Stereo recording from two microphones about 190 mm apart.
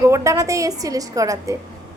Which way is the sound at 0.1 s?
15° right (ahead or behind).